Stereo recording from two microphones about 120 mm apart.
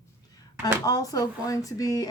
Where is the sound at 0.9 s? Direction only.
30° left (ahead or behind).